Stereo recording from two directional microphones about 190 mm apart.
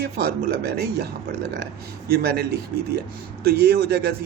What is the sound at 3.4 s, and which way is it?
Speech, 55° right (ahead or behind).